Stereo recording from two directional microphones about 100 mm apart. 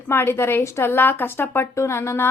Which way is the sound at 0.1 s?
25° left (ahead or behind).